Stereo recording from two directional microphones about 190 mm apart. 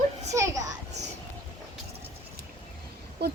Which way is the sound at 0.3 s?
15° right (ahead or behind).